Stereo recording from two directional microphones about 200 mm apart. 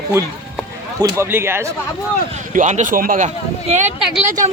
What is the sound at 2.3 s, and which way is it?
Speech, 35° right (ahead or behind).